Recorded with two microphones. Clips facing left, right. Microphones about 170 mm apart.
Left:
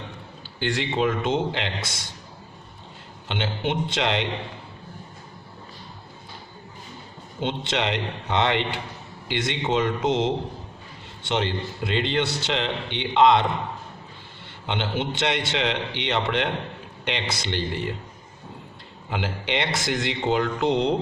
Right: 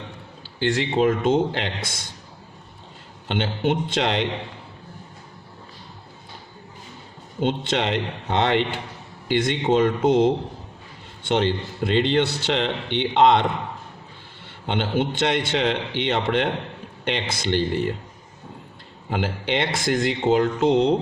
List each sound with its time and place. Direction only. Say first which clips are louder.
0.6 s speech: right 4 dB; 40° right (ahead or behind)
3.2 s speech: right 4 dB; 50° right (ahead or behind)
7.4 s a man's voice: right 3 dB; 50° right (ahead or behind)
14.7 s speech: right 4 dB; 50° right (ahead or behind)
19.1 s speech: right 3 dB; 50° right (ahead or behind)